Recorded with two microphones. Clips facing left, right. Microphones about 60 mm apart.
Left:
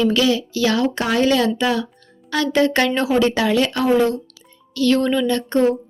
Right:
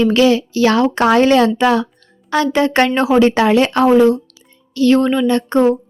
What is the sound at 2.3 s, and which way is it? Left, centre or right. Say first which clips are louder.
Speech: right 3 dB; right.